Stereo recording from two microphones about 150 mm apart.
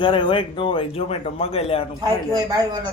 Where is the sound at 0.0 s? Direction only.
30° left (ahead or behind).